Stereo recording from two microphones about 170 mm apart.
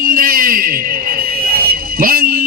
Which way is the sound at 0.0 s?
55° right (ahead or behind).